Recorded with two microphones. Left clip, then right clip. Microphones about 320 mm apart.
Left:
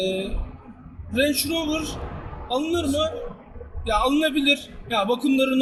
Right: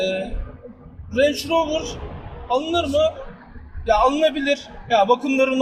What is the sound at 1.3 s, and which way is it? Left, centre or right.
Speech, right.